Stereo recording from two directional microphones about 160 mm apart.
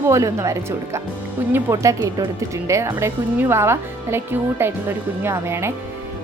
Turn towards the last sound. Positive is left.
turn(degrees=-15)  # may be behind; listen again after turning